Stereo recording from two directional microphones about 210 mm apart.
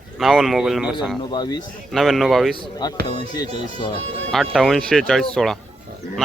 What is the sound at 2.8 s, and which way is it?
Speech, 20° left (ahead or behind).